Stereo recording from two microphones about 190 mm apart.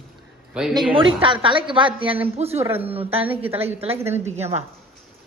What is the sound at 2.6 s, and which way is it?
Speech, 10° right (ahead or behind).